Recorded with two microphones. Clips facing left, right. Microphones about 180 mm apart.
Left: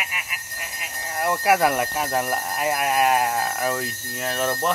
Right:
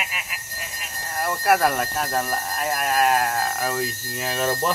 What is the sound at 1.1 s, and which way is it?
Jingle bell, 15° left (ahead or behind).